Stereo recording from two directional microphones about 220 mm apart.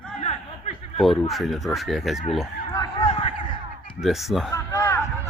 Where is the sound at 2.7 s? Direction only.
20° left (ahead or behind).